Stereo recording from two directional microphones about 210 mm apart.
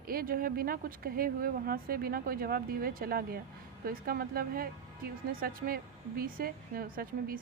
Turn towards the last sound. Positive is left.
turn(degrees=-45)  # may be behind; listen again after turning